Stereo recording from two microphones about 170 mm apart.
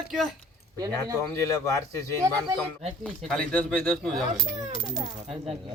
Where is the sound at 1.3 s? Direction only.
20° left (ahead or behind).